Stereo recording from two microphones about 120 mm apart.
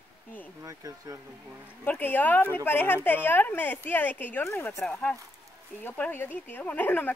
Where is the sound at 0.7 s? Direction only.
30° right (ahead or behind).